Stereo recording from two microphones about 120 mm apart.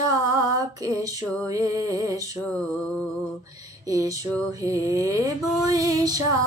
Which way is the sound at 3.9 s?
30° right (ahead or behind).